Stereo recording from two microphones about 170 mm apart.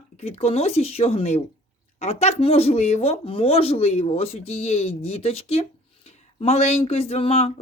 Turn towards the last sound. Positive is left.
turn(degrees=35)  # may be behind; listen again after turning